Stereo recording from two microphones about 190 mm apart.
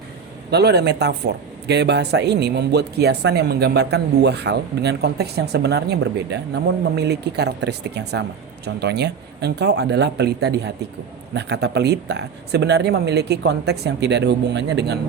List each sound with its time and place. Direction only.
0.5 s speech: 60° right (ahead or behind)